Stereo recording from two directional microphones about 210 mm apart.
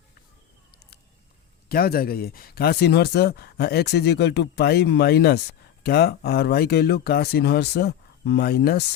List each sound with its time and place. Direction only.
1.7 s speech: 45° left (ahead or behind)